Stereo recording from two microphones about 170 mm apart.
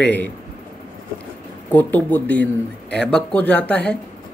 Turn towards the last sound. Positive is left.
turn(degrees=5)  # may be behind; listen again after turning